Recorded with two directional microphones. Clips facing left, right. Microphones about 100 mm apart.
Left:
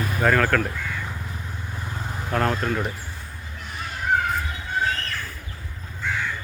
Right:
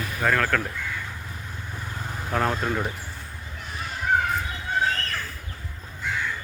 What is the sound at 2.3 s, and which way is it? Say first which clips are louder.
Speech: left 1 dB; 5° right (ahead or behind).